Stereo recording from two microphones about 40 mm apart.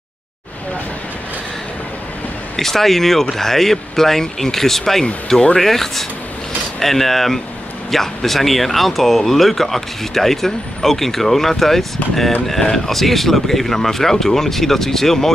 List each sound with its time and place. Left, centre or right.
2.5 s speech: centre
5.6 s speech: centre